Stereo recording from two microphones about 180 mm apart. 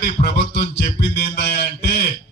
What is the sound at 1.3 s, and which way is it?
Mantra, 65° left (ahead or behind).